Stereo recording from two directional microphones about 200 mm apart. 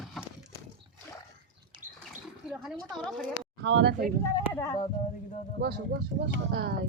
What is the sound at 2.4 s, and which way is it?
Speech, 5° right (ahead or behind).